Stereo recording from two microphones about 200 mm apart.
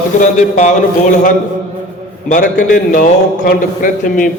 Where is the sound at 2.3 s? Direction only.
40° left (ahead or behind).